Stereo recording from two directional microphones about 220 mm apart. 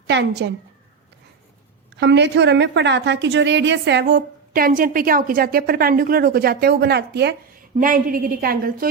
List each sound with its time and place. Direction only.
0.1 s a woman's voice: 50° right (ahead or behind)
2.0 s a woman's voice: 50° right (ahead or behind)
7.8 s a woman's voice: 40° right (ahead or behind)